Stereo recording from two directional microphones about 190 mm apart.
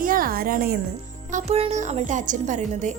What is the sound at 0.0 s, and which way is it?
Music, 50° right (ahead or behind).